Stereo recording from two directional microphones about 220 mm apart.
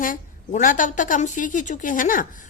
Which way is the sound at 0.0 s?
35° left (ahead or behind).